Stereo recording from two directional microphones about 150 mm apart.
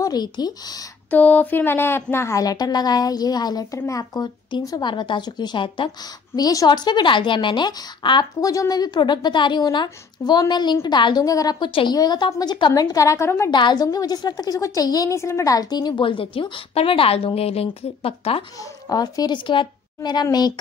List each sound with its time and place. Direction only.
0.0 s speech: 25° left (ahead or behind)
1.1 s speech: 10° left (ahead or behind)
13.5 s a woman's voice: 30° left (ahead or behind)
18.6 s speech: 25° left (ahead or behind)